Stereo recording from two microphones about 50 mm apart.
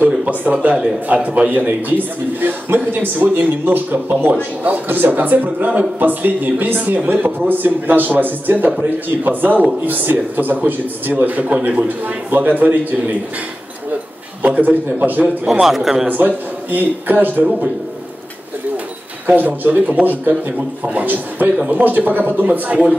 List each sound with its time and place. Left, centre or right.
0.0 s a man's voice: right
12.3 s a man's voice: right
14.4 s a man's voice: right
15.6 s a man's voice: centre
16.1 s a man's voice: right
19.2 s a man's voice: right